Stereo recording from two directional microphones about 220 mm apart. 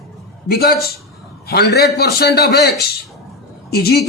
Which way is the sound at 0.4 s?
45° left (ahead or behind).